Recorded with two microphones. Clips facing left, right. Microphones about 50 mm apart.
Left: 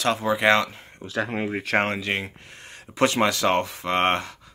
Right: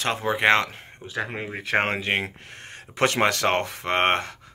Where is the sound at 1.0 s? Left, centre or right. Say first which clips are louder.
Left 3 dB; right.